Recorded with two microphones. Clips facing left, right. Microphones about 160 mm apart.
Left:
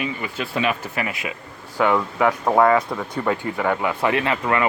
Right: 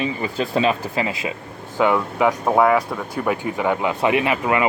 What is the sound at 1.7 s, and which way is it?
Speech, 15° right (ahead or behind).